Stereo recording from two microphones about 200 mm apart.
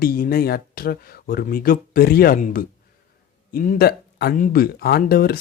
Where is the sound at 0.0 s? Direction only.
45° left (ahead or behind).